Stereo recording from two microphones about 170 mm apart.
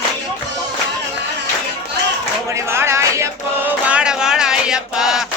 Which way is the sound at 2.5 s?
15° right (ahead or behind).